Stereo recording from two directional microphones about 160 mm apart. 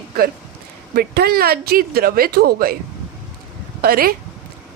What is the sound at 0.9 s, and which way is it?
A woman's voice, 80° right.